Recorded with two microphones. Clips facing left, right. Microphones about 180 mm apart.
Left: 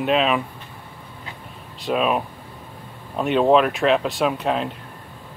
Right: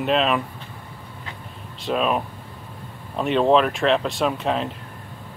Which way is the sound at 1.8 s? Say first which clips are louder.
Left 1 dB; 5° left (ahead or behind).